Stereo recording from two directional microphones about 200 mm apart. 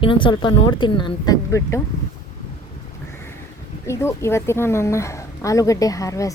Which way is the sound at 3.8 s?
15° left (ahead or behind).